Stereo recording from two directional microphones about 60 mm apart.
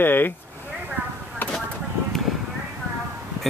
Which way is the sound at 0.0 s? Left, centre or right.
Left.